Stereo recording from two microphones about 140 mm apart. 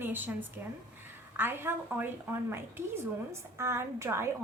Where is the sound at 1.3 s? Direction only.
15° right (ahead or behind).